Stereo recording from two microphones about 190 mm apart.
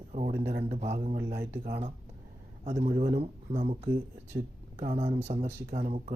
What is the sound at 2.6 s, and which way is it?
Speech, 35° right (ahead or behind).